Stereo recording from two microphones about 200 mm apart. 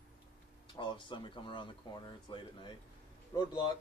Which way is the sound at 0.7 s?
25° left (ahead or behind).